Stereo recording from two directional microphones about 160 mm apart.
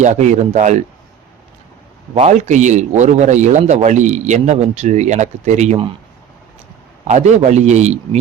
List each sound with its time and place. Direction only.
0.0 s a man's voice: 50° right (ahead or behind)
2.1 s a man's voice: 45° right (ahead or behind)
7.1 s a man's voice: 45° right (ahead or behind)